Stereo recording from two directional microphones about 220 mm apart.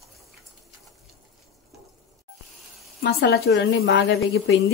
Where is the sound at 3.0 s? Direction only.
50° left (ahead or behind).